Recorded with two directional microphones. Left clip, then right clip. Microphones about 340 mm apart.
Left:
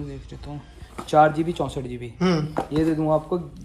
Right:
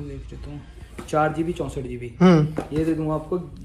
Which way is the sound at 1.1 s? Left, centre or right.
Left.